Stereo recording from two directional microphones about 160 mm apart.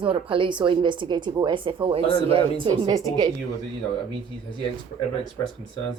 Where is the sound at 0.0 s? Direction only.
35° right (ahead or behind).